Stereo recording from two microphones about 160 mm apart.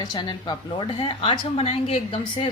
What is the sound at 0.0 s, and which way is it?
A woman's voice, 25° left (ahead or behind).